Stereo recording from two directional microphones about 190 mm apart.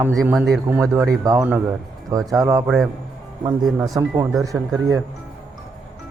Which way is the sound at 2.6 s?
Centre (ahead or behind).